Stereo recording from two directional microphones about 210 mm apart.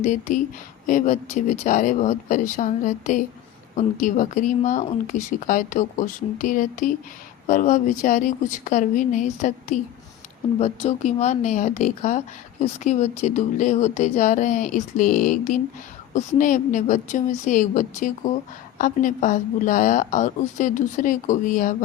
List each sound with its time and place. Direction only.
0.0 s speech: 35° left (ahead or behind)